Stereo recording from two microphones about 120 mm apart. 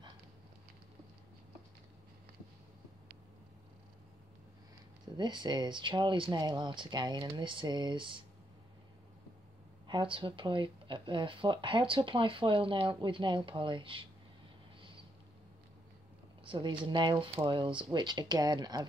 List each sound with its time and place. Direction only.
5.1 s speech: 40° right (ahead or behind)
9.8 s speech: 45° right (ahead or behind)
16.4 s speech: 45° right (ahead or behind)